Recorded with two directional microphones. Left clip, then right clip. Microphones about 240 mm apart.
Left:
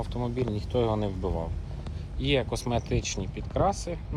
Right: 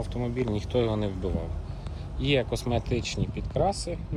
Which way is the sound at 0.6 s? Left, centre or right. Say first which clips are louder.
Even; centre.